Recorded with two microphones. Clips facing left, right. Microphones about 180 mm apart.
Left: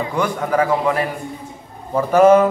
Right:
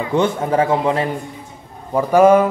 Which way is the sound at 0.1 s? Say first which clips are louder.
Right 5 dB; 25° right (ahead or behind).